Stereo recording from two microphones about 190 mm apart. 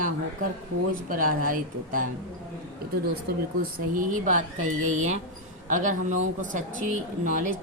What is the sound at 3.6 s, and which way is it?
A woman's voice, 45° right (ahead or behind).